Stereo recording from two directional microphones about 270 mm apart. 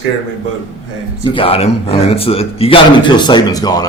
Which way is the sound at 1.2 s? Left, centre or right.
Centre.